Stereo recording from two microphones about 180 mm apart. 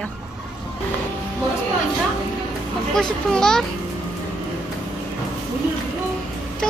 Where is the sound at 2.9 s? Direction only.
5° left (ahead or behind).